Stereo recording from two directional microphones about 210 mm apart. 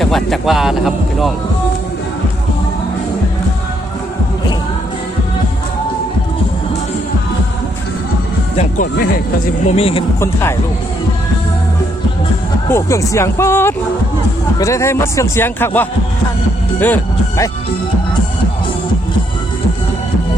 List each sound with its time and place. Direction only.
0.0 s speech: centre (ahead or behind)
8.5 s speech: 40° left (ahead or behind)
9.6 s speech: 30° left (ahead or behind)
12.6 s a man's voice: 15° left (ahead or behind)